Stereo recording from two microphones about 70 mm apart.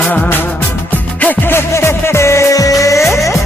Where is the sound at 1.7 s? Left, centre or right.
Left.